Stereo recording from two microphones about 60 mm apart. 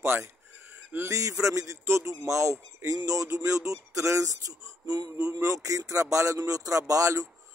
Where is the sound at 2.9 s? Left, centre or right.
Right.